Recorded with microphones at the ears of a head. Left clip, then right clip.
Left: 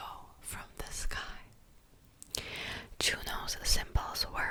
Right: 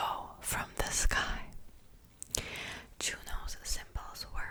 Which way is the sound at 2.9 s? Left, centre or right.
Left.